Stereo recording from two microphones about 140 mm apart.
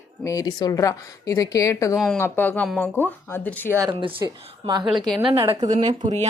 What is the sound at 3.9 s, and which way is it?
Speech, 35° right (ahead or behind).